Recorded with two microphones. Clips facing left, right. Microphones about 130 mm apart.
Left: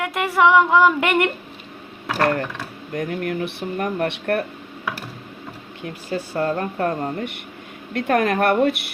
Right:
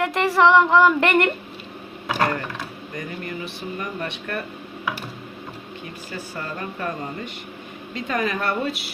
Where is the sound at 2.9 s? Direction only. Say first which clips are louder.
Left 8 dB; 70° left (ahead or behind).